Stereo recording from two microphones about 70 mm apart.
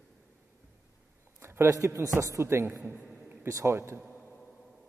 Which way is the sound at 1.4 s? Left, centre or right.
Right.